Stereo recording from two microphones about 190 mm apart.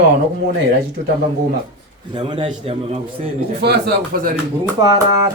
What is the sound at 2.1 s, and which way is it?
A man's voice, 30° right (ahead or behind).